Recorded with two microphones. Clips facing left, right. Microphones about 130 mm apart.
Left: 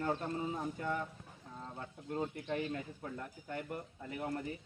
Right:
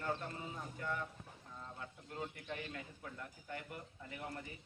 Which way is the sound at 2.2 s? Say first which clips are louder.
Left 7 dB; 35° left (ahead or behind).